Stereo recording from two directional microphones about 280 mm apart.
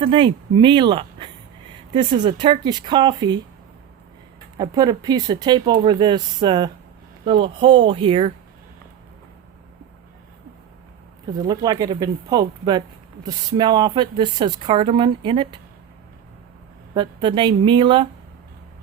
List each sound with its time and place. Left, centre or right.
0.0 s speech: centre
4.5 s speech: centre
11.4 s speech: centre
16.9 s speech: centre